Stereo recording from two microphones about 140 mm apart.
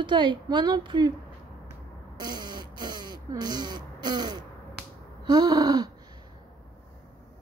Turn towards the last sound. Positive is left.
turn(degrees=-25)  # may be behind; listen again after turning